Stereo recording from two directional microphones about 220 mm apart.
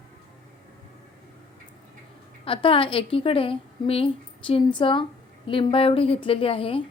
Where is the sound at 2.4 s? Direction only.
25° left (ahead or behind).